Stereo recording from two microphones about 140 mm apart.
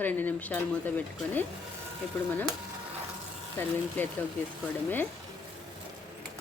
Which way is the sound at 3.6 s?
15° left (ahead or behind).